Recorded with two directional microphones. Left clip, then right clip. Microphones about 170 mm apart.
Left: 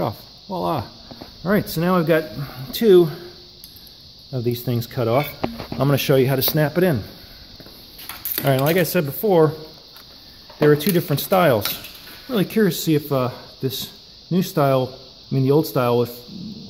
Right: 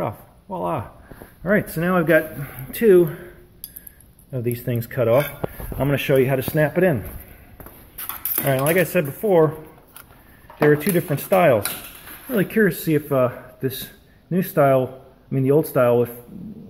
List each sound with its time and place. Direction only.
0.0 s speech: 25° left (ahead or behind)
4.3 s speech: 20° left (ahead or behind)
8.4 s speech: 25° left (ahead or behind)
10.8 s speech: 35° left (ahead or behind); by 16.1 s 15° left (ahead or behind)